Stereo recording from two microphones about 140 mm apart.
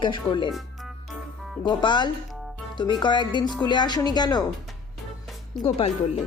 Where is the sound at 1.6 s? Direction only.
35° left (ahead or behind).